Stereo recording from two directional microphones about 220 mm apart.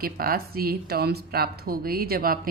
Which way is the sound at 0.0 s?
45° right (ahead or behind).